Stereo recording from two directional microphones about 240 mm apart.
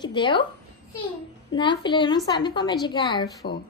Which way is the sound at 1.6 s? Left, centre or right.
Centre.